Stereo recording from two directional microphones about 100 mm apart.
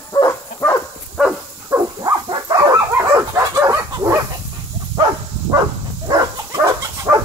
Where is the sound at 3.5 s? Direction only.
35° right (ahead or behind).